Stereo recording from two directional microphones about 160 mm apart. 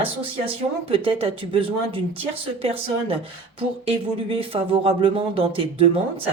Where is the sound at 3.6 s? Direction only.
35° right (ahead or behind).